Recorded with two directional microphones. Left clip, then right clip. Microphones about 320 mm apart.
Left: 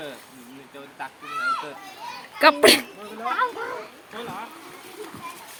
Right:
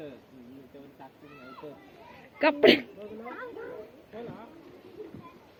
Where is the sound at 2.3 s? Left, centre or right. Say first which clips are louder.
Left 6 dB; centre.